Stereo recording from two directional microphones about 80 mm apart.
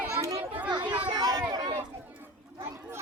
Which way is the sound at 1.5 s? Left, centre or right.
Right.